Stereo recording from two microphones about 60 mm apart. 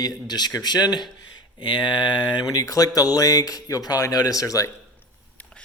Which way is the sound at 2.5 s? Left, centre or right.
Left.